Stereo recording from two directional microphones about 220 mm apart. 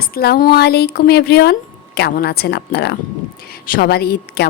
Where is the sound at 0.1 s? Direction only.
45° left (ahead or behind).